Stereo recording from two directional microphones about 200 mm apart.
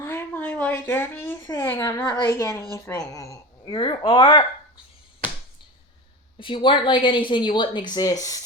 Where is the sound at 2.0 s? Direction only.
25° left (ahead or behind).